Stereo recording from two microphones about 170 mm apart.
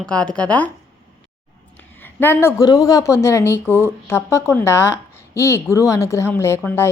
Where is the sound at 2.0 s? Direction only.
10° left (ahead or behind).